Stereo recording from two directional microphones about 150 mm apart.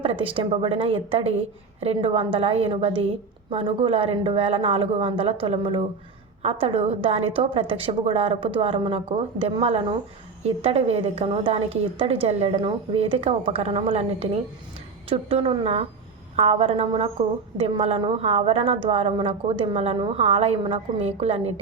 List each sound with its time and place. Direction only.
0.0 s a woman's voice: 35° right (ahead or behind)